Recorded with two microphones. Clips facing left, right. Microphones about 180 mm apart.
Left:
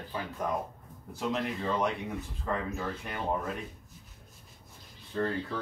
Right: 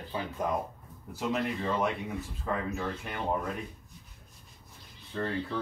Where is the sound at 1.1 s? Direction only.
5° right (ahead or behind).